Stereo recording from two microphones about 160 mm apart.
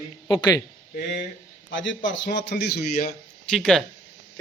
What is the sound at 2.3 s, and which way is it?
Speech, 90° left.